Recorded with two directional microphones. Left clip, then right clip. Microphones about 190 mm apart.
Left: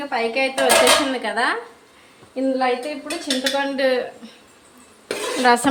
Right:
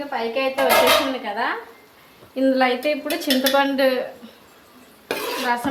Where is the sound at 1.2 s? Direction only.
35° left (ahead or behind).